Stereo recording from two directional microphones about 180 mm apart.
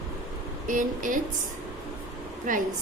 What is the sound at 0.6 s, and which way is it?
Speech, 45° right (ahead or behind).